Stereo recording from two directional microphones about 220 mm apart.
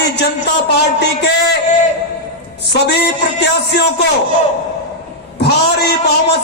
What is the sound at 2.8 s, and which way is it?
A man's voice, 50° left (ahead or behind).